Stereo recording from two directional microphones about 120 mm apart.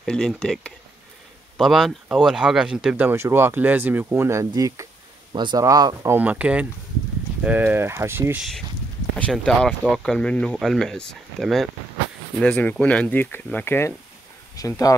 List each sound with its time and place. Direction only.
0.0 s speech: 5° left (ahead or behind); by 4.8 s 30° right (ahead or behind)
5.3 s speech: 40° right (ahead or behind)
5.6 s speech: 30° right (ahead or behind)
6.1 s speech: 10° right (ahead or behind)
8.4 s speech: centre (ahead or behind)
10.0 s speech: 10° left (ahead or behind); by 15.0 s 30° left (ahead or behind)